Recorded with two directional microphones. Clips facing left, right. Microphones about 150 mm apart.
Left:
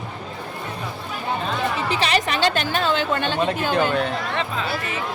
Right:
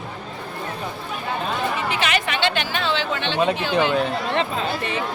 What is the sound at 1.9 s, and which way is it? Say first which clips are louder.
Speech: left 2 dB; 35° left (ahead or behind).